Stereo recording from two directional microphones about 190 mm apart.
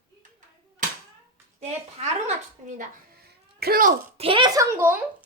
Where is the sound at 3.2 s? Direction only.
55° right (ahead or behind).